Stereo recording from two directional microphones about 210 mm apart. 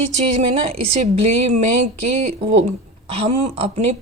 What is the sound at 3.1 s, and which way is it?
Speech, 30° right (ahead or behind).